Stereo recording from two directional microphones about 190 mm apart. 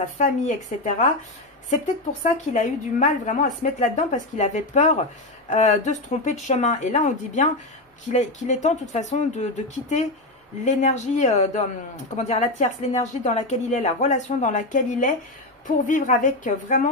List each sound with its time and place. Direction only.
0.2 s a woman's voice: 40° left (ahead or behind)